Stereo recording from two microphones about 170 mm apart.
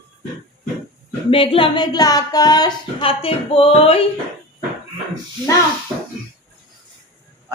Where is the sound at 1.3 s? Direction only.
30° left (ahead or behind).